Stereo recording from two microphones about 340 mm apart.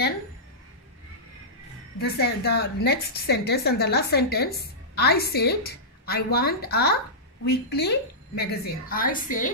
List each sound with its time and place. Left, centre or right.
2.0 s a woman's voice: left